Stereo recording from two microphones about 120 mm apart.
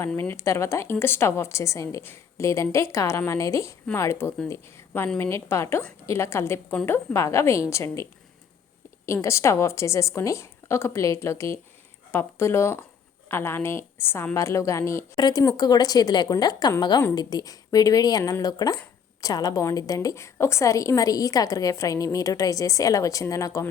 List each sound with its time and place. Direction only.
0.2 s a woman's voice: 20° left (ahead or behind)
5.3 s a woman's voice: 25° left (ahead or behind)
9.2 s a woman's voice: 25° left (ahead or behind)
15.1 s a woman's voice: 35° left (ahead or behind)